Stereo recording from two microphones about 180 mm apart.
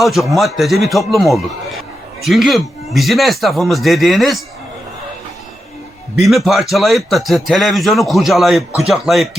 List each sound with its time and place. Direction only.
0.0 s a man's voice: centre (ahead or behind)
6.2 s a man's voice: centre (ahead or behind)